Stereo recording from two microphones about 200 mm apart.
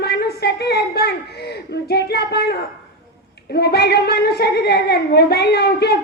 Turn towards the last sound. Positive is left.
turn(degrees=55)  # may be behind; listen again after turning